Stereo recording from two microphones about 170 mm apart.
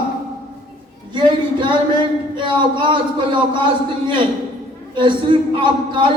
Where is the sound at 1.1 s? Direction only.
30° right (ahead or behind).